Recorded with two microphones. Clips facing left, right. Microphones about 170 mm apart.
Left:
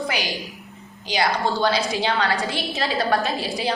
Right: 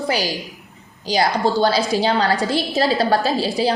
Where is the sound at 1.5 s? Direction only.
35° right (ahead or behind).